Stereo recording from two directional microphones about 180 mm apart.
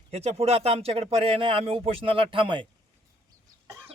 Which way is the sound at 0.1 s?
35° right (ahead or behind).